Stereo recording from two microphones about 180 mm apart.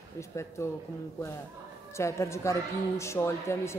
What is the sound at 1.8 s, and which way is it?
Speech, 15° left (ahead or behind).